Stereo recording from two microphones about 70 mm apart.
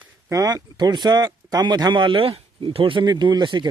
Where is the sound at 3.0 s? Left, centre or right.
Right.